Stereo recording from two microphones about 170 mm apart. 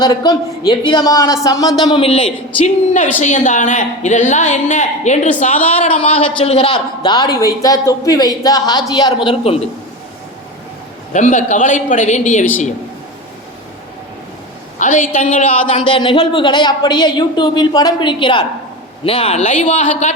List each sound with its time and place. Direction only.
0.0 s a woman's voice: 25° left (ahead or behind)
3.2 s a woman's voice: 45° left (ahead or behind)
5.8 s a woman's voice: 35° left (ahead or behind)
11.1 s a woman's voice: 45° left (ahead or behind)
14.8 s a woman's voice: 50° left (ahead or behind)
15.6 s a woman's voice: 30° left (ahead or behind)